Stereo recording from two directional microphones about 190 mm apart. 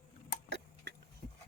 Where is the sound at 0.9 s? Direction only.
65° right (ahead or behind).